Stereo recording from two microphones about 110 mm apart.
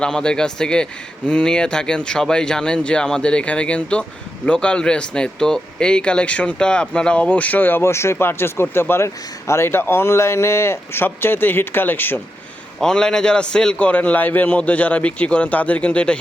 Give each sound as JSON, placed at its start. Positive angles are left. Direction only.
{"t": 0.0, "sound": "a man's voice", "side_deg": 10}
{"t": 12.8, "sound": "a man's voice", "side_deg": 5}